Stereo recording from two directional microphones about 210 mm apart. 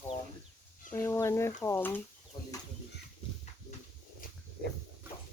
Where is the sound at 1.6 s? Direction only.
10° left (ahead or behind).